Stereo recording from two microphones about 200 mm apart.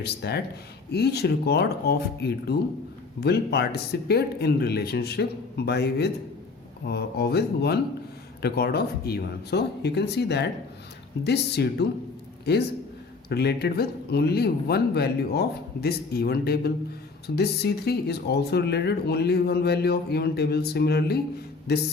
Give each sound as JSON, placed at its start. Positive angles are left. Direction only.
{"t": 0.0, "sound": "speech", "side_deg": 55}
{"t": 13.2, "sound": "speech", "side_deg": 55}